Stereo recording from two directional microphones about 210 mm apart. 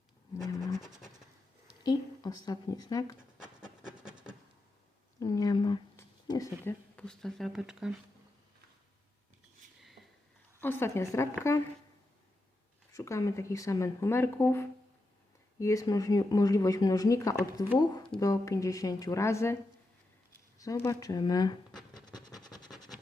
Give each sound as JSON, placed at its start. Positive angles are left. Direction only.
{"t": 1.8, "sound": "a woman's voice", "side_deg": 20}
{"t": 3.2, "sound": "a sound", "side_deg": -5}
{"t": 5.2, "sound": "speech", "side_deg": 15}
{"t": 9.8, "sound": "a sound", "side_deg": 0}
{"t": 10.6, "sound": "speech", "side_deg": 10}
{"t": 12.9, "sound": "speech", "side_deg": 15}
{"t": 20.6, "sound": "speech", "side_deg": 15}
{"t": 21.8, "sound": "vehicle", "side_deg": 20}